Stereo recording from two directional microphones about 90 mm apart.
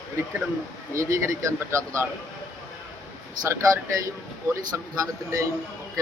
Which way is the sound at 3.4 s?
35° right (ahead or behind).